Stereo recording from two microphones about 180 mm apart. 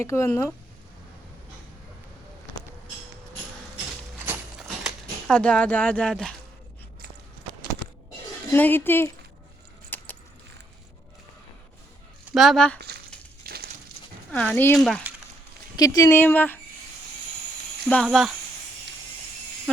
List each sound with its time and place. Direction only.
0.0 s speech: 15° left (ahead or behind)
5.3 s speech: 5° left (ahead or behind)
8.5 s speech: 10° left (ahead or behind)
9.9 s keys jangling: 10° left (ahead or behind)
12.3 s speech: centre (ahead or behind)
13.5 s a sound: 55° right (ahead or behind)
14.3 s speech: 5° left (ahead or behind)
15.1 s a sound: 10° right (ahead or behind)
15.7 s speech: 20° left (ahead or behind)
17.8 s speech: 5° left (ahead or behind)